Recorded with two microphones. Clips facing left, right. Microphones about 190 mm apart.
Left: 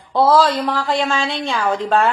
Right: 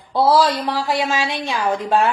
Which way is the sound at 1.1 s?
20° right (ahead or behind).